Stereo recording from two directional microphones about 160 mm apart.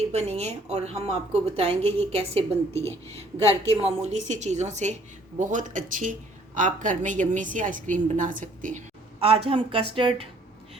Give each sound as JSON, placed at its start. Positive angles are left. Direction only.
{"t": 0.1, "sound": "a woman's voice", "side_deg": -40}
{"t": 9.2, "sound": "a woman's voice", "side_deg": -35}